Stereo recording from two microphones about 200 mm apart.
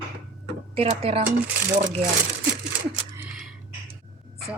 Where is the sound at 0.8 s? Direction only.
30° right (ahead or behind).